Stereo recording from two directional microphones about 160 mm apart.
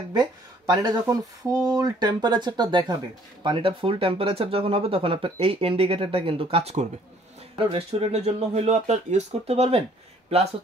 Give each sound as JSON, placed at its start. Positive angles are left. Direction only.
{"t": 0.1, "sound": "speech", "side_deg": -25}